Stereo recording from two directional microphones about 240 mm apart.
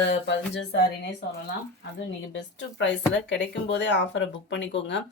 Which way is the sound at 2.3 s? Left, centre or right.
Left.